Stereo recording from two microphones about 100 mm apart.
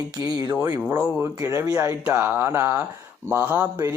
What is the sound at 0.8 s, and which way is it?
Speech, 20° right (ahead or behind).